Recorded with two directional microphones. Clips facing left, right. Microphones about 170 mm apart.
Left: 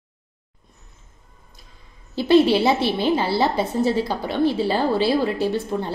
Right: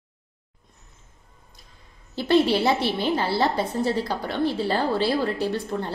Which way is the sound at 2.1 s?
15° left (ahead or behind).